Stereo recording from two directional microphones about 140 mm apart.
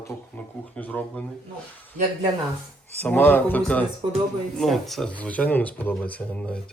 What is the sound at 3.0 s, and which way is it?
Speech, 15° left (ahead or behind).